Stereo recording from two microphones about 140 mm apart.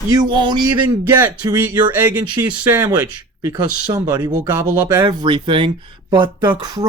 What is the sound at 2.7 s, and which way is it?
Speech, 20° right (ahead or behind).